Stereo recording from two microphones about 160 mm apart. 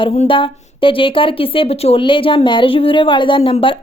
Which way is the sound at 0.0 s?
35° left (ahead or behind).